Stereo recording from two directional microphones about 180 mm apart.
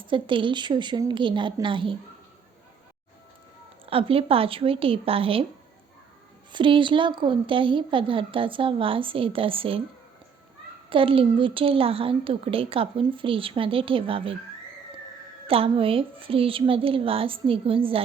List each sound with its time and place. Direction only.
0.1 s a woman's voice: 30° right (ahead or behind)
3.8 s a woman's voice: 30° right (ahead or behind)
6.5 s a woman's voice: 25° right (ahead or behind)
10.8 s a woman's voice: 30° right (ahead or behind)
15.4 s a woman's voice: 30° right (ahead or behind)